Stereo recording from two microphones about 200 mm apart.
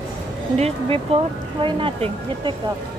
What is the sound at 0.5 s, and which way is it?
Speech, 30° right (ahead or behind).